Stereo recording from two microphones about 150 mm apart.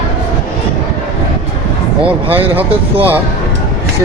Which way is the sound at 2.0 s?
10° right (ahead or behind).